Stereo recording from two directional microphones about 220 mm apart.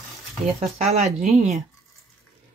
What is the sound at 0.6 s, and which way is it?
Speech, 30° right (ahead or behind).